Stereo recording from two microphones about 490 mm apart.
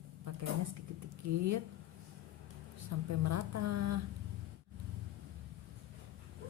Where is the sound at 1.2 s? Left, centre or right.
Right.